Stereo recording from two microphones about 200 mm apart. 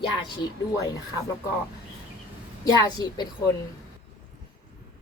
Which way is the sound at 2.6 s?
20° left (ahead or behind).